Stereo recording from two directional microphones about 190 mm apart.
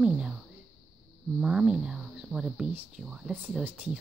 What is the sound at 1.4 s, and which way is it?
Speech, 5° right (ahead or behind).